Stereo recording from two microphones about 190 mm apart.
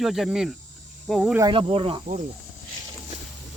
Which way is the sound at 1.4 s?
25° right (ahead or behind).